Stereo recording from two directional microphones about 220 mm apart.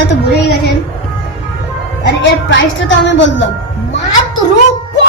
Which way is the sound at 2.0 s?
55° left (ahead or behind).